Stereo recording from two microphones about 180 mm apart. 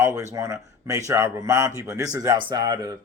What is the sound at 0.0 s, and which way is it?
A man's voice, 15° right (ahead or behind).